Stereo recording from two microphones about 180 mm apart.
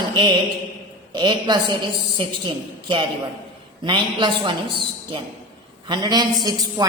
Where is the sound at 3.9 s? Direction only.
25° right (ahead or behind).